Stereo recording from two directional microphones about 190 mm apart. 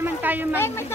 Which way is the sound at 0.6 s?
15° left (ahead or behind).